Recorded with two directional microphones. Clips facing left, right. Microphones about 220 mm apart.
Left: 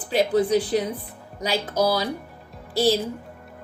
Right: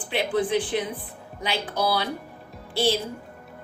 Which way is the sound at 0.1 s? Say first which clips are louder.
Left 4 dB; 40° left (ahead or behind).